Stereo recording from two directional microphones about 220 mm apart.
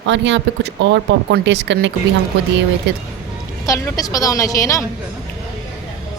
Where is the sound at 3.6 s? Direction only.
15° left (ahead or behind).